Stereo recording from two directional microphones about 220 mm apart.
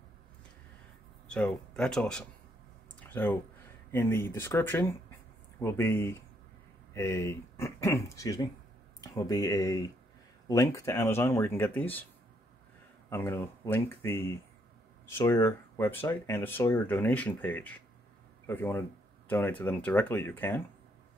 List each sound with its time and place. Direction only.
1.3 s speech: 5° left (ahead or behind)
3.0 s a sound: 10° left (ahead or behind)
3.9 s speech: 10° left (ahead or behind)
13.1 s speech: 10° left (ahead or behind)